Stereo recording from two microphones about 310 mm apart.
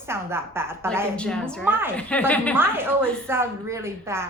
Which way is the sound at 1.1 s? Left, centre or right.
Centre.